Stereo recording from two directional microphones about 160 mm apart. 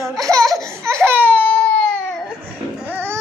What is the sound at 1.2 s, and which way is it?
Baby cry, 10° left (ahead or behind).